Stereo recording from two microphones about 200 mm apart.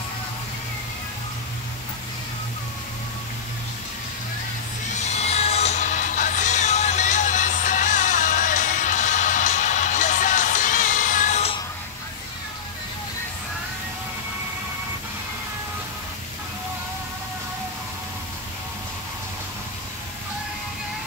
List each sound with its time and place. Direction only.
4.9 s music: 35° left (ahead or behind)